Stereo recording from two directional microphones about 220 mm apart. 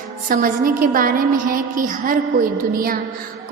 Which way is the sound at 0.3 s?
40° right (ahead or behind).